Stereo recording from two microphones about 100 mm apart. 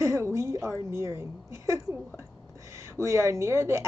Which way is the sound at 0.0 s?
30° right (ahead or behind).